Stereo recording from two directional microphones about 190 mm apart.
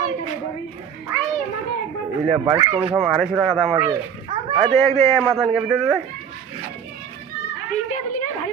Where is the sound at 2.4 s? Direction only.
20° right (ahead or behind).